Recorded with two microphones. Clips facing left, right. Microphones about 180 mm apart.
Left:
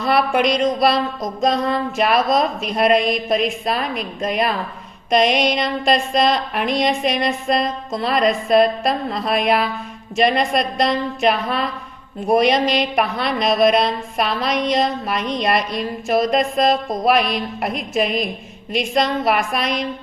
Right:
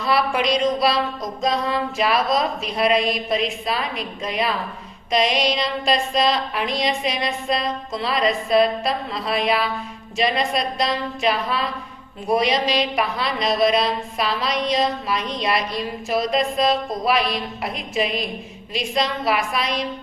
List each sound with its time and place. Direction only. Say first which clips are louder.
0.0 s music: left 3 dB; 55° left (ahead or behind)
12.3 s speech: left 4 dB; 55° left (ahead or behind)
14.7 s music: left 2 dB; 50° left (ahead or behind)